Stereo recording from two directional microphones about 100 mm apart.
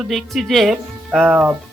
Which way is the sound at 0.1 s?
Centre (ahead or behind).